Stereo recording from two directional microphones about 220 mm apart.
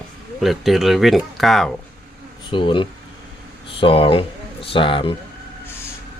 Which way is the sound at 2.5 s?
20° left (ahead or behind).